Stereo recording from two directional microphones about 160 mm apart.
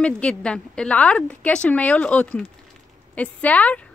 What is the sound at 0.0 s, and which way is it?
Speech, 5° left (ahead or behind).